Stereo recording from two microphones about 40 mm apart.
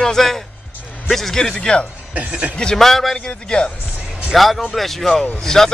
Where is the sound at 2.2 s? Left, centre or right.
Right.